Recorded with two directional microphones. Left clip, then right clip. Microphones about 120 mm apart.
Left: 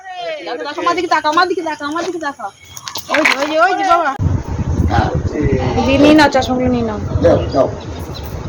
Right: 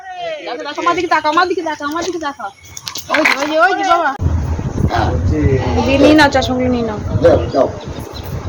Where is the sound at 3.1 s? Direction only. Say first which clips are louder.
Even; 5° right (ahead or behind).